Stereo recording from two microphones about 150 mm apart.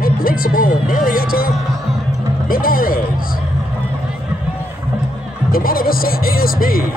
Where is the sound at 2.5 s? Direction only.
70° left (ahead or behind).